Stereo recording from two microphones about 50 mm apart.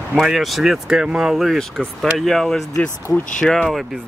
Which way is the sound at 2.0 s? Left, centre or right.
Centre.